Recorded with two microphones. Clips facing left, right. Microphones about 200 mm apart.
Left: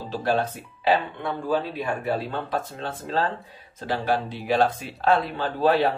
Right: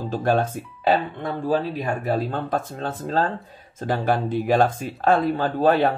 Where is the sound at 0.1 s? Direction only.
50° right (ahead or behind).